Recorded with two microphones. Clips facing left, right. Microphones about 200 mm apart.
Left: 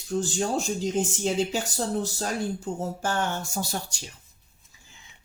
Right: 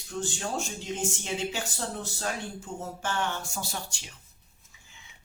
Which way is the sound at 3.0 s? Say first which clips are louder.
Even; 45° left (ahead or behind).